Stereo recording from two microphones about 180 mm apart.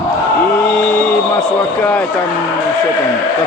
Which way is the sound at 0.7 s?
5° left (ahead or behind).